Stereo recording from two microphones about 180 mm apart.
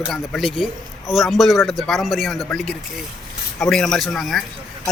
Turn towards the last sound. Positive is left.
turn(degrees=0)  # may be behind; listen again after turning